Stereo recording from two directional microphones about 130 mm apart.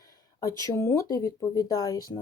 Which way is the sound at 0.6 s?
20° left (ahead or behind).